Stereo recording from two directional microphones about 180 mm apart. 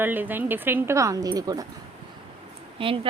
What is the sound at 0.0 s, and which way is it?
A woman's voice, 10° right (ahead or behind).